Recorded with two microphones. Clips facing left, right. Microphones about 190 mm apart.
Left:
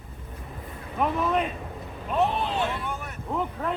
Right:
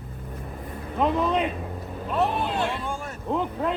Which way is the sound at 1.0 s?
20° right (ahead or behind).